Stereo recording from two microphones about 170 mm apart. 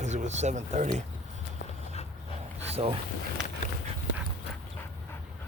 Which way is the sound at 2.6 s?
35° right (ahead or behind).